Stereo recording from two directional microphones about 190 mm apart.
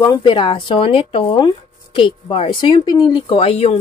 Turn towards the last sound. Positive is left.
turn(degrees=30)  # may be behind; listen again after turning